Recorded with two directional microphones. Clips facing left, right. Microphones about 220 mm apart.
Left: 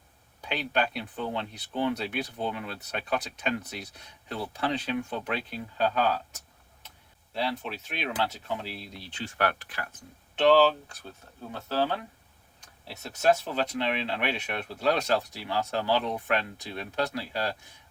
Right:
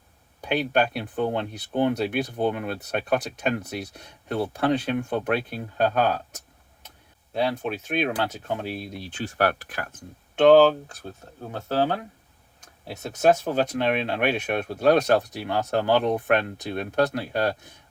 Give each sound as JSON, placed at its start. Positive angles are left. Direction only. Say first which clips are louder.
{"t": 0.4, "sound": "speech", "louder": "right 6 dB", "side_deg": -50}
{"t": 7.3, "sound": "speech", "louder": "right 6 dB", "side_deg": -50}
{"t": 13.4, "sound": "speech", "louder": "right 6 dB", "side_deg": -50}